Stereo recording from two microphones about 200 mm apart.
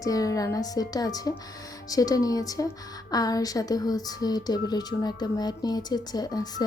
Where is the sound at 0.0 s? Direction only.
15° left (ahead or behind).